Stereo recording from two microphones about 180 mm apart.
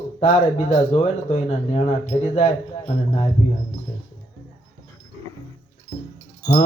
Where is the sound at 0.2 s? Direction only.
35° left (ahead or behind).